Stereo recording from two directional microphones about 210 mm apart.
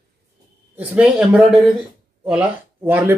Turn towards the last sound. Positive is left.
turn(degrees=-10)  # may be behind; listen again after turning